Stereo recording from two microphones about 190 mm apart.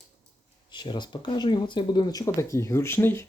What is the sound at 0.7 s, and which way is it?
Speech, 25° left (ahead or behind).